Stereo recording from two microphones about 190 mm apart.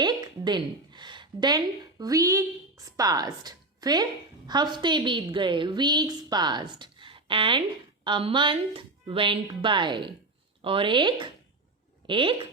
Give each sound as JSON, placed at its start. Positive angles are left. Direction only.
{"t": 0.0, "sound": "a woman's voice", "side_deg": -20}